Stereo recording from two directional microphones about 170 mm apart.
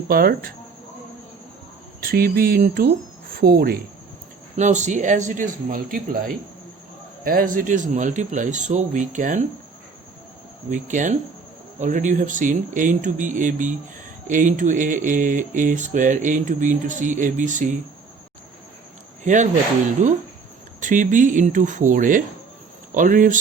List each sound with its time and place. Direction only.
0.1 s speech: 60° right (ahead or behind)
2.0 s speech: 60° right (ahead or behind)
4.5 s speech: 45° right (ahead or behind)
10.7 s speech: 45° right (ahead or behind)
19.2 s speech: 45° right (ahead or behind)